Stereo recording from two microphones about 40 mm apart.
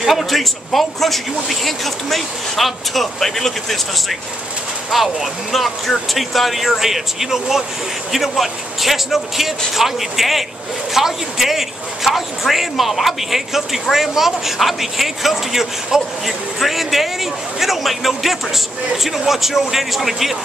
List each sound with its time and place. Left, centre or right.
0.0 s a man's voice: centre